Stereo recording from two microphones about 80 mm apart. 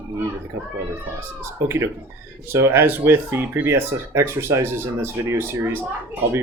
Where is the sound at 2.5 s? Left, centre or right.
Right.